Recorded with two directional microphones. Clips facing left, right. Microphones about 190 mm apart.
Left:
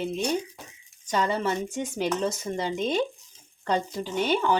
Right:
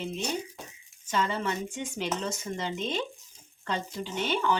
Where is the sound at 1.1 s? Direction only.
40° left (ahead or behind).